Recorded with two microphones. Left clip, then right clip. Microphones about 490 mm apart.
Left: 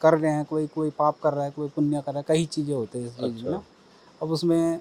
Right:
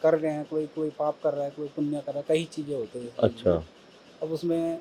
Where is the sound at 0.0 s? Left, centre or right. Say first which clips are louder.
Left 3 dB; left.